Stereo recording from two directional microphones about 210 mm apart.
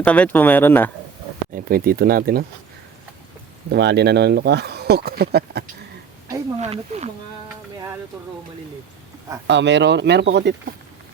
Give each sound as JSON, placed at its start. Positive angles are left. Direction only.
{"t": 0.0, "sound": "speech", "side_deg": 5}
{"t": 1.5, "sound": "speech", "side_deg": -45}
{"t": 3.7, "sound": "speech", "side_deg": -55}
{"t": 6.2, "sound": "speech", "side_deg": -30}
{"t": 7.4, "sound": "speech", "side_deg": -15}
{"t": 9.5, "sound": "speech", "side_deg": -55}